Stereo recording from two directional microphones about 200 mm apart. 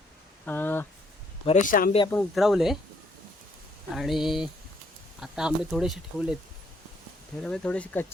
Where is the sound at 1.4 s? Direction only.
35° left (ahead or behind).